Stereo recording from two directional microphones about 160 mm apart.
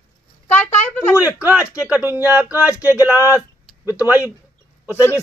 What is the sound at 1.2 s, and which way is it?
Speech, 10° right (ahead or behind).